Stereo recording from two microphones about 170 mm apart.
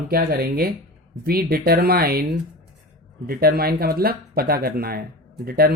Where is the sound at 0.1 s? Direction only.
60° right (ahead or behind).